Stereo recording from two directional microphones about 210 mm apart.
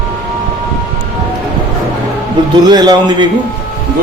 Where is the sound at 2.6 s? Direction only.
20° right (ahead or behind).